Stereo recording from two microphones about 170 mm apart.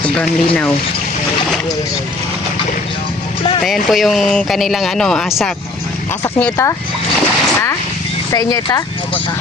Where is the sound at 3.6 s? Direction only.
Centre (ahead or behind).